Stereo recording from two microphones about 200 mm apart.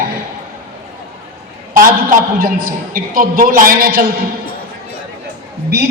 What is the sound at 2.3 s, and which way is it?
A man's voice, 45° right (ahead or behind).